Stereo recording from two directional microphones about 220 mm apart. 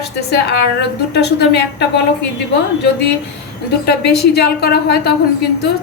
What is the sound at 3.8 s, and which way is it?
Speech, 50° left (ahead or behind).